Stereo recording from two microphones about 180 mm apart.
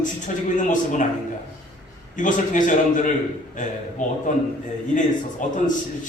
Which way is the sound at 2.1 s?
45° left (ahead or behind).